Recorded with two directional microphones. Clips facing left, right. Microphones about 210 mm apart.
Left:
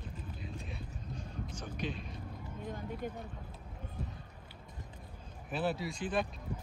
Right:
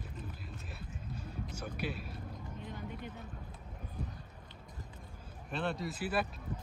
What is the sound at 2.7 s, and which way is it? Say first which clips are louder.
Music: left 6 dB; 45° left (ahead or behind).